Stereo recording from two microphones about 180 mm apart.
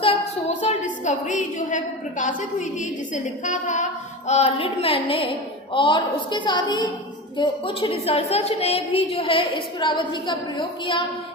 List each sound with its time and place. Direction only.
0.0 s a woman's voice: 35° left (ahead or behind)